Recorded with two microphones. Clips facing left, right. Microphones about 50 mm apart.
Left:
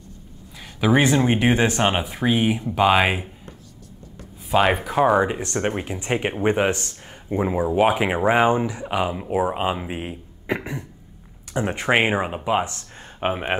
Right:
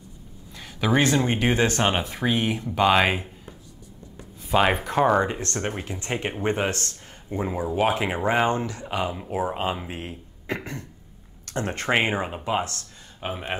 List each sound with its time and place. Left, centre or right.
0.6 s speech: centre
4.5 s speech: centre
13.2 s speech: left